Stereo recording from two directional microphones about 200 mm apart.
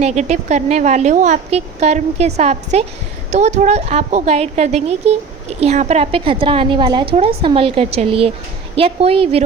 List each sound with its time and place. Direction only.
0.0 s a woman's voice: 35° right (ahead or behind)